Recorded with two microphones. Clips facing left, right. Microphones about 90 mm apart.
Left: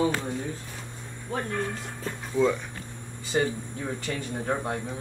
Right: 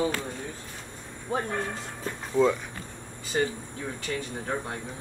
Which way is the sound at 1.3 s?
15° right (ahead or behind).